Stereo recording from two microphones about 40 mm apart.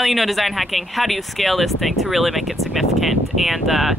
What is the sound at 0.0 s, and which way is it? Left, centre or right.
Speech, centre.